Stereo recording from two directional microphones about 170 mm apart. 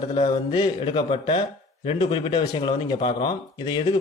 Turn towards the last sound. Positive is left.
turn(degrees=25)  # may be behind; listen again after turning